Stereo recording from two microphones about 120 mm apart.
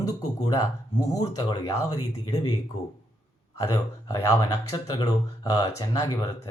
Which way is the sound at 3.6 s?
30° left (ahead or behind).